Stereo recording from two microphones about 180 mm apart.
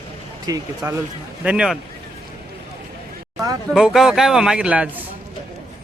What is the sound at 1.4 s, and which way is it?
Speech, 5° right (ahead or behind).